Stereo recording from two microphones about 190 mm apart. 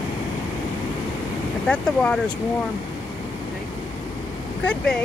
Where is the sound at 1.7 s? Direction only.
5° left (ahead or behind).